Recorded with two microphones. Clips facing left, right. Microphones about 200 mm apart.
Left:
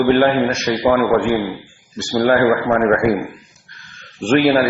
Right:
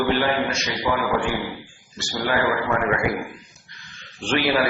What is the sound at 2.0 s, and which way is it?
Speech, 50° left (ahead or behind).